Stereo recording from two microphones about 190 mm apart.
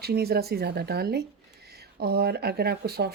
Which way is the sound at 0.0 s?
55° right (ahead or behind).